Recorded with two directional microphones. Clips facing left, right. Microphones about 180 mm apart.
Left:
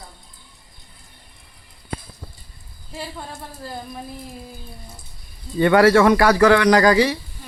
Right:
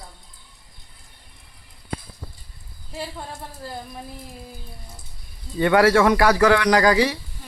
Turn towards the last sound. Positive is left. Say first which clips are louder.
# left 3 dB
turn(degrees=-10)  # may be behind; listen again after turning